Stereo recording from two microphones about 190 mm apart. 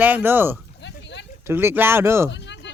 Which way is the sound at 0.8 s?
65° left (ahead or behind).